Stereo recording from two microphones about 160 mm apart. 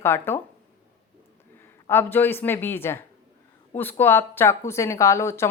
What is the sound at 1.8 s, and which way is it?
Speech, 15° left (ahead or behind).